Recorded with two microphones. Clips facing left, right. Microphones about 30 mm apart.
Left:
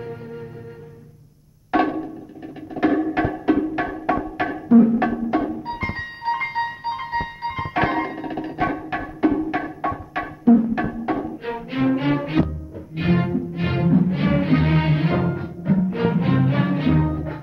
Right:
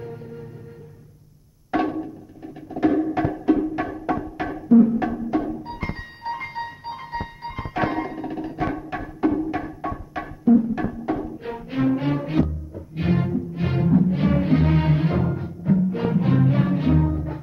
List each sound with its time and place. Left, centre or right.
0.0 s music: left
1.7 s music: left